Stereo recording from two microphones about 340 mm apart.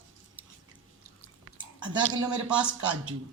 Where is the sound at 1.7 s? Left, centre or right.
Centre.